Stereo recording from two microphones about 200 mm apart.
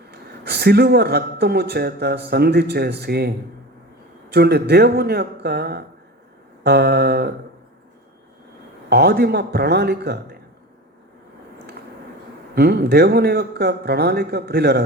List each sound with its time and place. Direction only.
0.1 s a man's voice: 55° right (ahead or behind)
8.9 s a man's voice: 50° right (ahead or behind)
12.5 s a man's voice: 55° right (ahead or behind)